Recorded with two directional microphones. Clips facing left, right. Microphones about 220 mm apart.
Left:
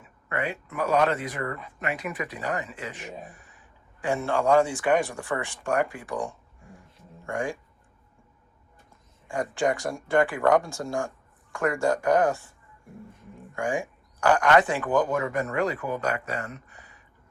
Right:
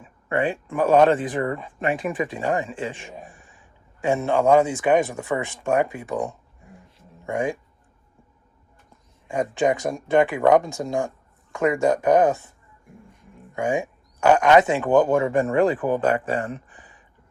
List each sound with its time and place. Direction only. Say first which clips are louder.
0.0 s speech: right 7 dB; 30° right (ahead or behind)
9.2 s speech: right 4 dB; 20° right (ahead or behind)
13.6 s speech: right 4 dB; 20° right (ahead or behind)